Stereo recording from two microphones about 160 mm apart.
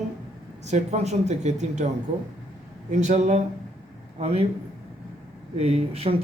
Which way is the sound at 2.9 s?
50° right (ahead or behind).